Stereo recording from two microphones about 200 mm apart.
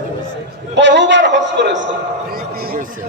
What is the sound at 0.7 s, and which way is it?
A man's voice, 60° right (ahead or behind).